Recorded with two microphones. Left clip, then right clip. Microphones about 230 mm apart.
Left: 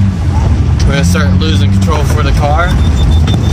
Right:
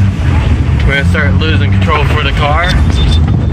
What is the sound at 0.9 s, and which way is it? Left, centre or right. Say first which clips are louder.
Speech: right 2 dB; centre.